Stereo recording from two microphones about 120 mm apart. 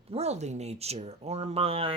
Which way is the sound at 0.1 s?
65° right (ahead or behind).